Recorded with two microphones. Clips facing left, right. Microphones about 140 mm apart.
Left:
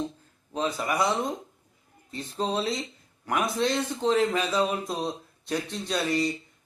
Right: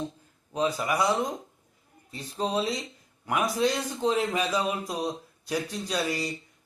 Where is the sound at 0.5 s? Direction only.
10° right (ahead or behind).